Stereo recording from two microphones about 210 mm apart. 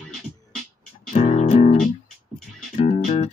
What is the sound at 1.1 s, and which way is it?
Music, 40° left (ahead or behind).